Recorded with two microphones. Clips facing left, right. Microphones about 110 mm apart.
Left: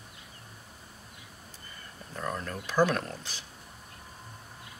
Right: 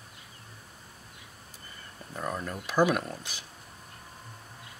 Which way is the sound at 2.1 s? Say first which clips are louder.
Right 1 dB; 10° right (ahead or behind).